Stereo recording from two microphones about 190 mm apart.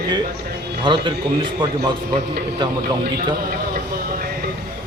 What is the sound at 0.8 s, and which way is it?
A man's voice, 25° right (ahead or behind).